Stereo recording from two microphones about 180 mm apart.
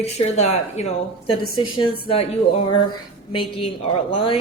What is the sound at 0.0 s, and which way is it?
Speech, 35° left (ahead or behind).